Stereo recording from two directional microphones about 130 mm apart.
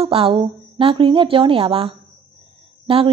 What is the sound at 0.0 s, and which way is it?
A woman's voice, 45° right (ahead or behind).